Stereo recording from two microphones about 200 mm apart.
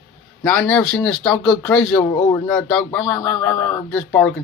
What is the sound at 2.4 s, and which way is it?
Speech, 5° left (ahead or behind).